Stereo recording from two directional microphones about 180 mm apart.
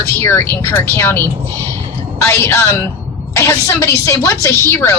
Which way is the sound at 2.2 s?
15° left (ahead or behind).